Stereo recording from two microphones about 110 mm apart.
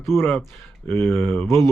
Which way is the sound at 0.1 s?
20° left (ahead or behind).